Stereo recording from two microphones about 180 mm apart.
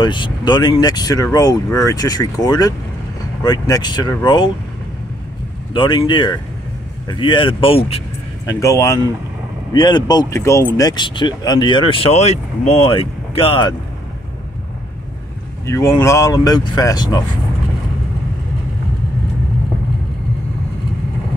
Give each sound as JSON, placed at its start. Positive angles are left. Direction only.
{"t": 0.0, "sound": "speech", "side_deg": 25}
{"t": 5.7, "sound": "speech", "side_deg": 25}
{"t": 8.5, "sound": "speech", "side_deg": 15}
{"t": 15.6, "sound": "speech", "side_deg": 15}